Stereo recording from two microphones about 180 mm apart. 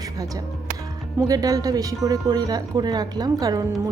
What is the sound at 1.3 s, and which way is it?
Speech, 20° right (ahead or behind).